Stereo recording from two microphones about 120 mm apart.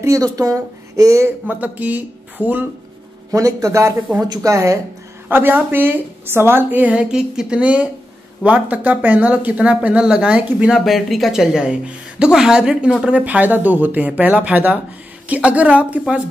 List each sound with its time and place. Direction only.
0.0 s speech: 30° right (ahead or behind)
3.3 s a woman's voice: 25° right (ahead or behind); by 16.2 s 10° right (ahead or behind)